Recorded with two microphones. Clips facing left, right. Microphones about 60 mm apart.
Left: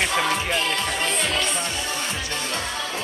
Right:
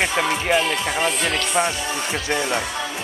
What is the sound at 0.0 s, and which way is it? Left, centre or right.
Music, centre.